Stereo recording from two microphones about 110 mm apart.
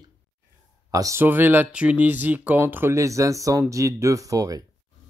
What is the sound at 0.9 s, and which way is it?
Speech, 30° right (ahead or behind).